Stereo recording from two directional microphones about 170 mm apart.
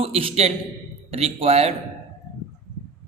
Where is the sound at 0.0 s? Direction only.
35° right (ahead or behind).